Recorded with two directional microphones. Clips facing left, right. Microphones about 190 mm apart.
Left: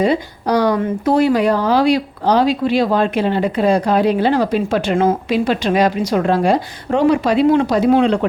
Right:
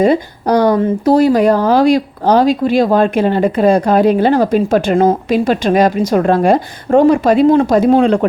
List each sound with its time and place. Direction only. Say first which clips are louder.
0.0 s speech: right 4 dB; 50° right (ahead or behind)
0.8 s speech: right 4 dB; 35° right (ahead or behind)